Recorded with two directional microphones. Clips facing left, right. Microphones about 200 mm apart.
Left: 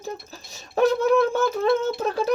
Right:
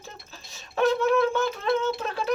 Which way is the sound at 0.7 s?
40° left (ahead or behind).